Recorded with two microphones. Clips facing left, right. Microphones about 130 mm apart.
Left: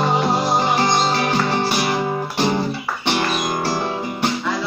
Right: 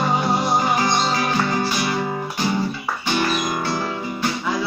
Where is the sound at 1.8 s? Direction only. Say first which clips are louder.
Left 2 dB; 70° left (ahead or behind).